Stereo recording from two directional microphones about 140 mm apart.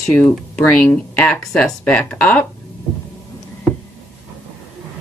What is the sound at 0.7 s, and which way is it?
Speech, 10° left (ahead or behind).